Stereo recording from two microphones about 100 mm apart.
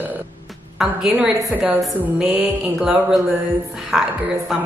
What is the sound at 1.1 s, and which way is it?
A woman's voice, 15° right (ahead or behind).